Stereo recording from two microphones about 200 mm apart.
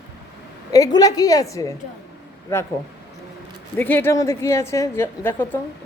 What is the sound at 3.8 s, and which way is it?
A woman's voice, 10° left (ahead or behind).